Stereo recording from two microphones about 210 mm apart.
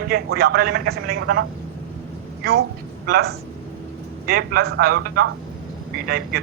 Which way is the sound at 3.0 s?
45° right (ahead or behind).